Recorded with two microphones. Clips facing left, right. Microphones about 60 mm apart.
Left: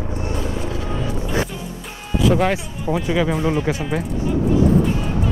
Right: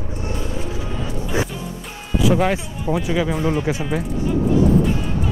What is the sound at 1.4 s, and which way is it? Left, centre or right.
Music, centre.